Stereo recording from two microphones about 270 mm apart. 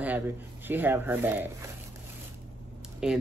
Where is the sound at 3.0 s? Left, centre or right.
Centre.